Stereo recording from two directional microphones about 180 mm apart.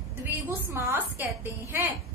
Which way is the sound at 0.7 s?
15° right (ahead or behind).